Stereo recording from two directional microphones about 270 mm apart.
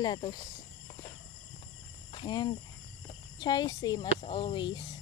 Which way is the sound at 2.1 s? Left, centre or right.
Centre.